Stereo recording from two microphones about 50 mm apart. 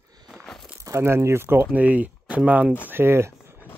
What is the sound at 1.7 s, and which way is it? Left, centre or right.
Speech, right.